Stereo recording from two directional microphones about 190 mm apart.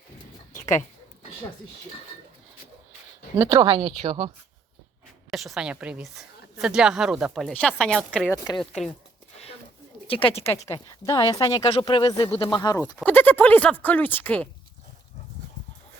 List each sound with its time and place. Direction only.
0.5 s a sound: 15° left (ahead or behind)
3.3 s speech: 20° right (ahead or behind)
5.3 s a woman's voice: centre (ahead or behind)
10.1 s speech: 30° left (ahead or behind)
13.1 s speech: 10° left (ahead or behind)